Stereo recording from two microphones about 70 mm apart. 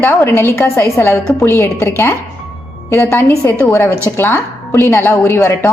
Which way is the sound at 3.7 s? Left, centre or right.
Left.